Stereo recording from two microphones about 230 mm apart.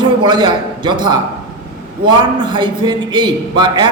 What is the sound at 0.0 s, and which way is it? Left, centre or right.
A man's voice, centre.